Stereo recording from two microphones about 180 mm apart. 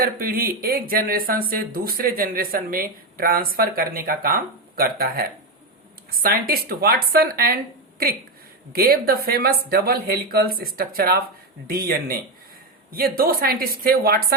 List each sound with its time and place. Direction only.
0.0 s speech: 55° right (ahead or behind)